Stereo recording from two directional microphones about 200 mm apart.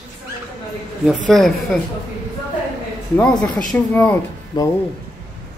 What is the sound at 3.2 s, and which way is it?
Speech, 5° left (ahead or behind).